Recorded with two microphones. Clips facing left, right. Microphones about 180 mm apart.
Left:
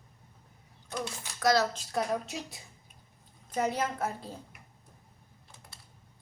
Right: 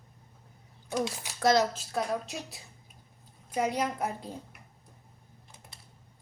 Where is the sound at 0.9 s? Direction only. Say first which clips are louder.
Right 6 dB; 15° right (ahead or behind).